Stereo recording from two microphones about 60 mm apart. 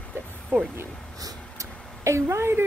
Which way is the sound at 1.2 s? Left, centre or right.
Right.